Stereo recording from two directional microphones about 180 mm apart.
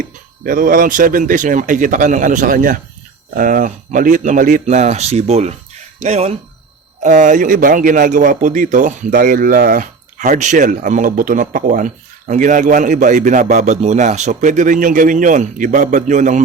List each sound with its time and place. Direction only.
0.4 s a man's voice: 50° right (ahead or behind)